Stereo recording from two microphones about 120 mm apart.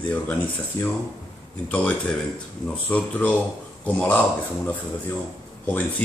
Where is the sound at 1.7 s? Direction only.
10° left (ahead or behind).